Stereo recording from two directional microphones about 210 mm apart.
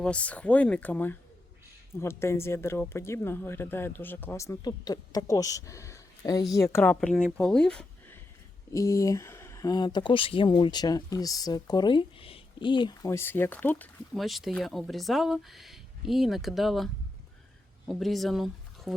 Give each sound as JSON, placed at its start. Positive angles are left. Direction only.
{"t": 0.0, "sound": "speech", "side_deg": 5}